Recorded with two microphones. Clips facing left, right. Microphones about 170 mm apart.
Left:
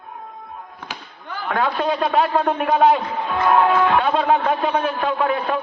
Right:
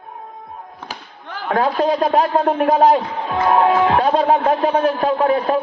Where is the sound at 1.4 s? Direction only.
35° right (ahead or behind).